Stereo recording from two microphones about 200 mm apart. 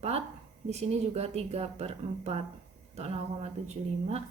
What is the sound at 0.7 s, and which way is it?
A woman's voice, 35° right (ahead or behind).